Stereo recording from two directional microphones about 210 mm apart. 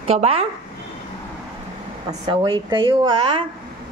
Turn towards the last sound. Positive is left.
turn(degrees=-25)  # may be behind; listen again after turning